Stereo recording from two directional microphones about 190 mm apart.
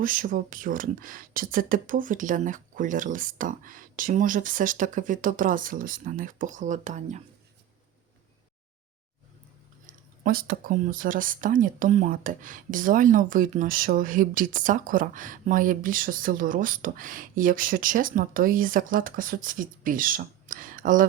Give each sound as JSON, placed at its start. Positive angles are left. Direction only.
{"t": 0.0, "sound": "speech", "side_deg": -45}
{"t": 9.8, "sound": "speech", "side_deg": -50}